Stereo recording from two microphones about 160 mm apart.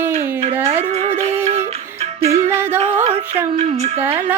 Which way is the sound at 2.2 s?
40° right (ahead or behind).